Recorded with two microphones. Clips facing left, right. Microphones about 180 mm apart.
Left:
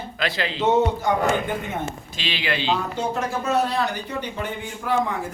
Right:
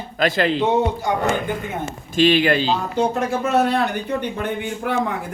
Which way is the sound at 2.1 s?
50° right (ahead or behind).